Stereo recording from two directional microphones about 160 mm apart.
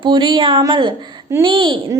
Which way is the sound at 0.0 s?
30° right (ahead or behind).